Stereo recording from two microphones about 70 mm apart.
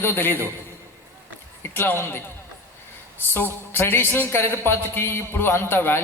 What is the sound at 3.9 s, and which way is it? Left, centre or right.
A man's voice, left.